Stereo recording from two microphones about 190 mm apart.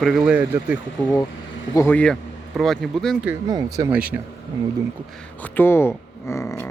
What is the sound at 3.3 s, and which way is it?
Speech, 20° right (ahead or behind).